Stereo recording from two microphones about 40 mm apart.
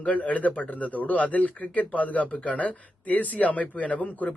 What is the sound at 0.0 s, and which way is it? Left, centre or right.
Speech, left.